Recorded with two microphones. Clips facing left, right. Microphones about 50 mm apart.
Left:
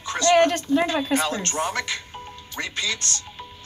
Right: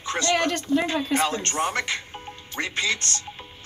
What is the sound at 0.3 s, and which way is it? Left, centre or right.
Speech, left.